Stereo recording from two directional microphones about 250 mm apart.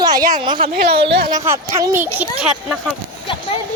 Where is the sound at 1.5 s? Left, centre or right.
Centre.